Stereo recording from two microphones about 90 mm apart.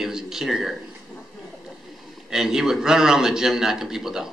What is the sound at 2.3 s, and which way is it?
A man's voice, 5° right (ahead or behind).